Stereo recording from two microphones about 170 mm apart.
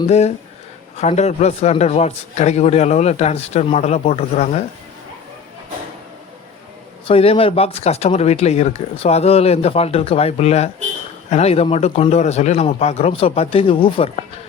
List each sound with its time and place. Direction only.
0.1 s a man's voice: 40° left (ahead or behind)
7.1 s a man's voice: 35° left (ahead or behind)